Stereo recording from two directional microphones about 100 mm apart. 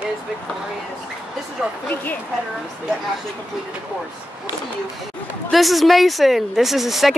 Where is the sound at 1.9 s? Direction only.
15° left (ahead or behind).